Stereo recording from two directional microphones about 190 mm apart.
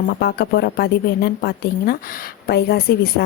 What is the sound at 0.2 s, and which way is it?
A woman's voice, 55° left (ahead or behind).